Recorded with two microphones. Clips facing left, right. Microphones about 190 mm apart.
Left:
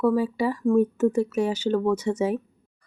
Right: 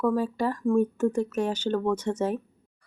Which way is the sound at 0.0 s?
10° left (ahead or behind).